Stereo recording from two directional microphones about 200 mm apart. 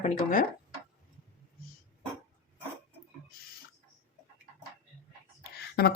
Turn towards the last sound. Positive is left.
turn(degrees=50)  # may be behind; listen again after turning